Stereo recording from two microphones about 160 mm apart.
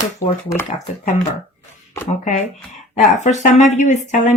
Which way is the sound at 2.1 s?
55° left (ahead or behind).